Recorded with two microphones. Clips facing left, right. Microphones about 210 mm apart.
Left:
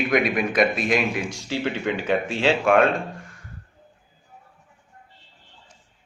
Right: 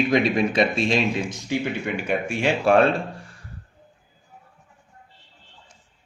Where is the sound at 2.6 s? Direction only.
35° right (ahead or behind).